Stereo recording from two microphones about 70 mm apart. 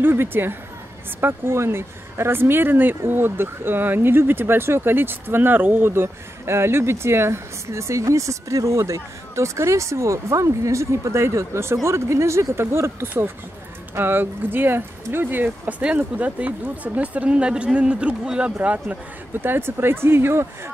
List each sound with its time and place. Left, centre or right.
0.0 s speech: right